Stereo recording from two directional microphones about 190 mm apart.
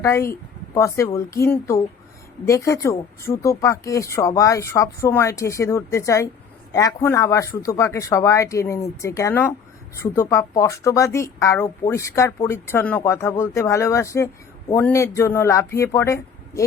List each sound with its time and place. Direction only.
0.0 s speech: 15° left (ahead or behind)